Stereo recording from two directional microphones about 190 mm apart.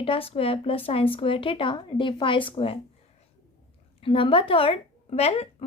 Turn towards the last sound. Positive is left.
turn(degrees=30)  # may be behind; listen again after turning